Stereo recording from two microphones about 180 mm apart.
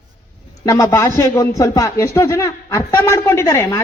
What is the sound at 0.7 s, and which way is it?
A man's voice, 20° left (ahead or behind).